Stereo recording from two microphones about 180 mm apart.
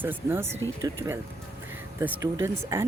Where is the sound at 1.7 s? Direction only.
10° right (ahead or behind).